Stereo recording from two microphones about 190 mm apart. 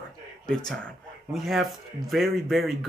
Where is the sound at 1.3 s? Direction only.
Centre (ahead or behind).